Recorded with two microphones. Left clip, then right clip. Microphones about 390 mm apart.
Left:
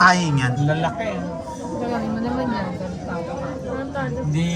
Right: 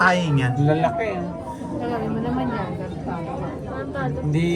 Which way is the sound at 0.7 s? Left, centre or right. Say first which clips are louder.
Right 5 dB; centre.